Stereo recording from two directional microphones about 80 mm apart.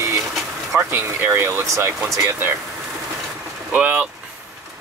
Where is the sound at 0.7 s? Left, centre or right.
Right.